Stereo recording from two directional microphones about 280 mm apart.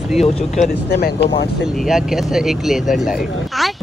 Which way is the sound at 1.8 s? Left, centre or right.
Centre.